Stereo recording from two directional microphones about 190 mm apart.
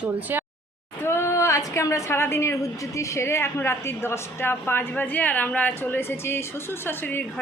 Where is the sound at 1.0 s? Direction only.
15° left (ahead or behind).